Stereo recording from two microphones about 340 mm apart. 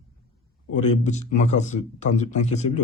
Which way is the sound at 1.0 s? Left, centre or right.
Centre.